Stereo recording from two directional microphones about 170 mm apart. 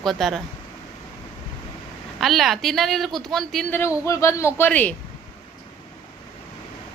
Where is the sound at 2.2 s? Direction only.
Centre (ahead or behind).